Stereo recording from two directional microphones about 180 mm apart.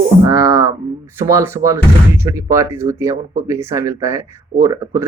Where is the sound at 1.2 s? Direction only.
15° right (ahead or behind).